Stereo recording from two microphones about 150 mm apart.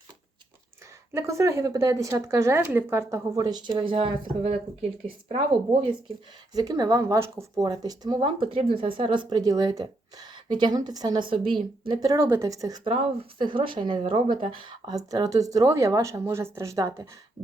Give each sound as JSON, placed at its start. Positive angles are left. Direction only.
{"t": 1.1, "sound": "speech", "side_deg": -20}
{"t": 6.5, "sound": "speech", "side_deg": -25}
{"t": 12.8, "sound": "speech", "side_deg": -40}